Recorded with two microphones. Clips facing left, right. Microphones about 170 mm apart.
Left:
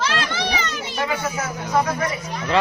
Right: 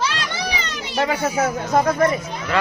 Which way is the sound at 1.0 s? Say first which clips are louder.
Right 6 dB; 45° right (ahead or behind).